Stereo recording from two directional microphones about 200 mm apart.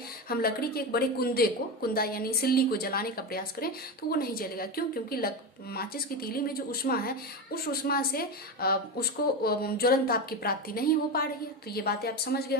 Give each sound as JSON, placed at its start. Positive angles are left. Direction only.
{"t": 0.3, "sound": "a woman's voice", "side_deg": 50}